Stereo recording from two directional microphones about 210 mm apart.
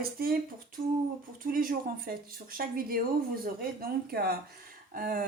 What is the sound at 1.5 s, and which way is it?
Speech, 45° right (ahead or behind).